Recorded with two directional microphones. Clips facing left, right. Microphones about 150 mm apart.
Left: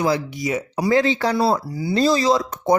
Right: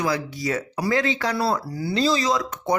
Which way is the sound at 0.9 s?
30° left (ahead or behind).